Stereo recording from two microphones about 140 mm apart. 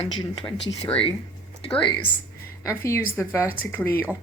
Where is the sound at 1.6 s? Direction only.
10° left (ahead or behind).